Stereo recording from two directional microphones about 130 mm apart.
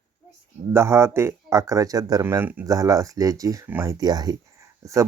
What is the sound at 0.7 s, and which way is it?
Speech, 20° right (ahead or behind).